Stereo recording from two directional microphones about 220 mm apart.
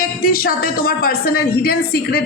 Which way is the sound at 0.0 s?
40° left (ahead or behind).